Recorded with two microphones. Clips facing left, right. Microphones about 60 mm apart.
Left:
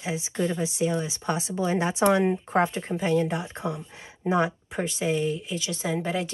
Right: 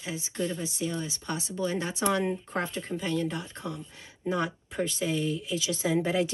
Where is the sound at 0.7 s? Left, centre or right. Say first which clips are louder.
Left 6 dB; centre.